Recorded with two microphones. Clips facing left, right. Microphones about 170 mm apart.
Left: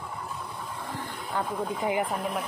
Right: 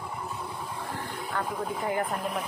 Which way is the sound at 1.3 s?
15° left (ahead or behind).